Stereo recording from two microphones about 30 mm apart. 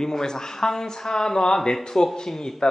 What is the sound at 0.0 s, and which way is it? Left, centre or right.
Speech, left.